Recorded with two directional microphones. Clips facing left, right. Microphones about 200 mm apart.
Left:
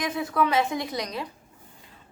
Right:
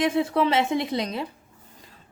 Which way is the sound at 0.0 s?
25° right (ahead or behind).